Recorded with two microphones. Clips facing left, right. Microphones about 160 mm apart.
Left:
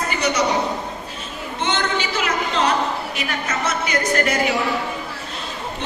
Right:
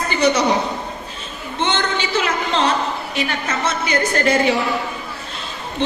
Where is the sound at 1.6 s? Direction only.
25° right (ahead or behind).